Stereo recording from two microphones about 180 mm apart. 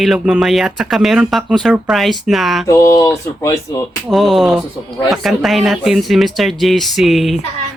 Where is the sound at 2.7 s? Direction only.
15° left (ahead or behind).